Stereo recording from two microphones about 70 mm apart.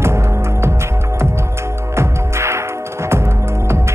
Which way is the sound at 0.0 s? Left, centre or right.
Right.